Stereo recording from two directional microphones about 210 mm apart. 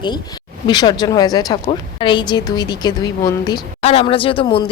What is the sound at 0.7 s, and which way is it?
A woman's voice, 20° left (ahead or behind).